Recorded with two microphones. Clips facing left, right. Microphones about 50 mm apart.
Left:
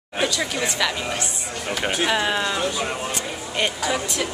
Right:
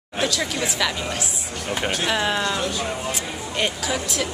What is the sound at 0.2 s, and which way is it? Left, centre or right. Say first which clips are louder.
Speech: even; centre.